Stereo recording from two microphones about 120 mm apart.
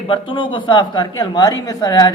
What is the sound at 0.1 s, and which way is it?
A man's voice, 45° left (ahead or behind).